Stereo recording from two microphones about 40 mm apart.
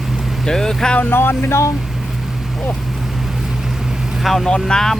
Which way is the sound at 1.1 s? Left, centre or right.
Left.